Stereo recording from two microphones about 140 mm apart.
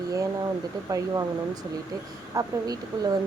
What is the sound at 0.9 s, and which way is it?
Speech, 25° right (ahead or behind).